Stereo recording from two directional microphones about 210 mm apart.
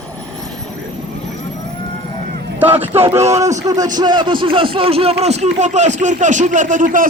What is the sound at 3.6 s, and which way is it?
A man's voice, 15° right (ahead or behind).